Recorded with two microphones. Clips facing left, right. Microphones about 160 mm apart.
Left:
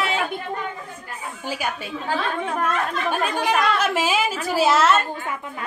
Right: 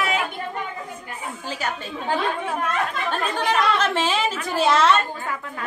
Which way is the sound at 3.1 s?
10° left (ahead or behind).